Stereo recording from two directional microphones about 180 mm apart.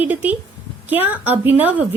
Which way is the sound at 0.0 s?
10° right (ahead or behind).